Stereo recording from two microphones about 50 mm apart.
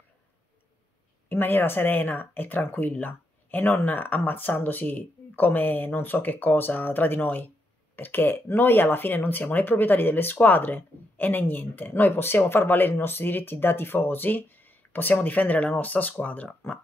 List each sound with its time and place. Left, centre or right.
1.3 s speech: left